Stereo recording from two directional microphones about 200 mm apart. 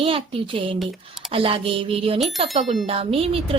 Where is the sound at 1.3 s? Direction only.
25° right (ahead or behind).